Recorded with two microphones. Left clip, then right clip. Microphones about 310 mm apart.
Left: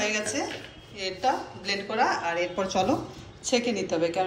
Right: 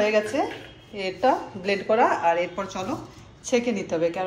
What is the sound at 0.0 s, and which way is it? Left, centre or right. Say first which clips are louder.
A woman's voice: right 6 dB; centre.